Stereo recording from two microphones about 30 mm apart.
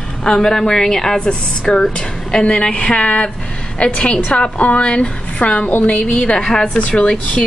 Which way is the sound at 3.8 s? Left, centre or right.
Left.